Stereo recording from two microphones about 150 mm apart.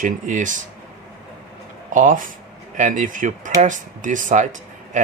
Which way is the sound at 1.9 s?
60° right (ahead or behind).